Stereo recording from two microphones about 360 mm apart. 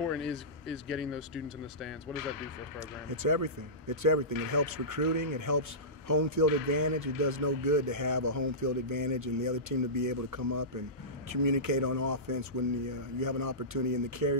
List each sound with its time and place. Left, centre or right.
0.1 s speech: centre
3.2 s speech: right